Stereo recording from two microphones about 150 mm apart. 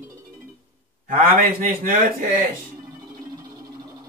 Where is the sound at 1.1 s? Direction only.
70° right (ahead or behind).